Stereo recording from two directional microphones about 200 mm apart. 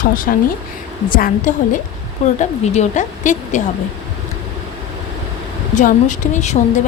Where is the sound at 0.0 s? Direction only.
45° left (ahead or behind).